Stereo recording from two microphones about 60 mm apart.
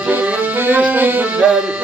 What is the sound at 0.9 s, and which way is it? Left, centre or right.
Music, right.